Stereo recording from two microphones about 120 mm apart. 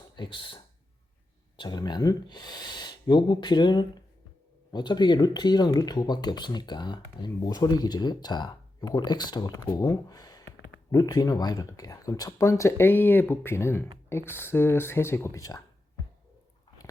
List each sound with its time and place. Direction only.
0.2 s speech: 45° left (ahead or behind)